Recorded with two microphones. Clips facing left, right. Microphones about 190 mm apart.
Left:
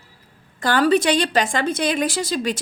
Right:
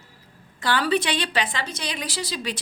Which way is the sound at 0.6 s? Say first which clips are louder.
Left 6 dB; 45° left (ahead or behind).